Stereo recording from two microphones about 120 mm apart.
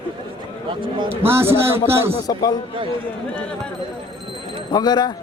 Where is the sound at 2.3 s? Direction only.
35° left (ahead or behind).